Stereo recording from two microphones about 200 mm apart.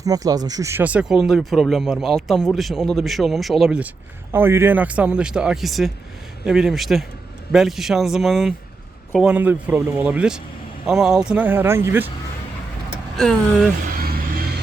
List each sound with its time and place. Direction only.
0.0 s speech: 15° right (ahead or behind)
14.0 s music: 45° right (ahead or behind)